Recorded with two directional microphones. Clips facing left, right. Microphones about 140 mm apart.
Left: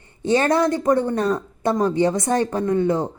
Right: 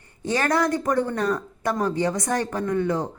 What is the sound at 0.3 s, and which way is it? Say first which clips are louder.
Speech: left 4 dB; 25° left (ahead or behind).